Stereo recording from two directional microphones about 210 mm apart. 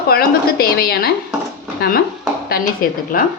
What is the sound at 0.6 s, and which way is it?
A woman's voice, 45° left (ahead or behind).